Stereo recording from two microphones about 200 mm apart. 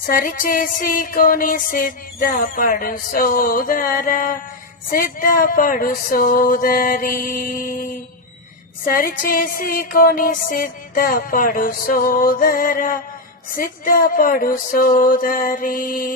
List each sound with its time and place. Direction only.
0.1 s speech: 45° left (ahead or behind)
9.0 s speech: 45° left (ahead or behind)